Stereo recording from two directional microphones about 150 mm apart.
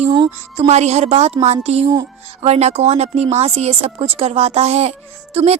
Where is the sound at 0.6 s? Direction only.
45° right (ahead or behind).